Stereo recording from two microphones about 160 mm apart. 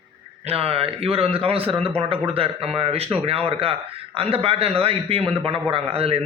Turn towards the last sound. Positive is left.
turn(degrees=-35)  # may be behind; listen again after turning